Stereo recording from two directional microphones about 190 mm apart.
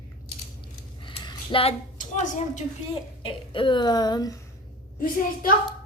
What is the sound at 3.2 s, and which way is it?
A woman's voice, 25° left (ahead or behind).